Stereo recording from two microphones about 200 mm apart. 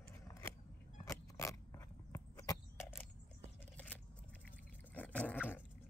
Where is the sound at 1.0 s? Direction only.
15° left (ahead or behind).